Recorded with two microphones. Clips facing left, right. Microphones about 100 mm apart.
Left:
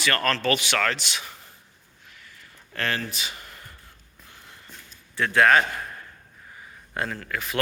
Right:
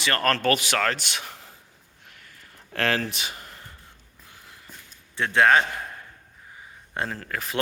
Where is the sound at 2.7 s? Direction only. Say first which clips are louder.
Right 3 dB; 90° right.